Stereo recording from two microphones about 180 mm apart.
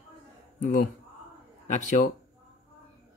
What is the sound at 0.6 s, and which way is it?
Speech, 45° left (ahead or behind).